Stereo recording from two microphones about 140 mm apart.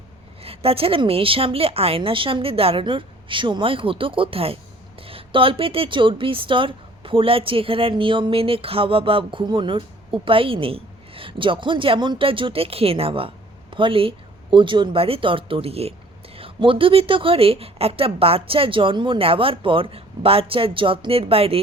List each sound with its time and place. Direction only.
0.4 s speech: 45° right (ahead or behind)